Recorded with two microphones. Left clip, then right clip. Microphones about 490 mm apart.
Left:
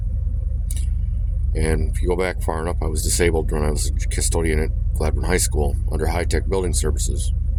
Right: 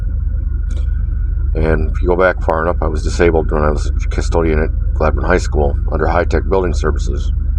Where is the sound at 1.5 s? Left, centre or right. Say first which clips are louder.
Right 7 dB; left.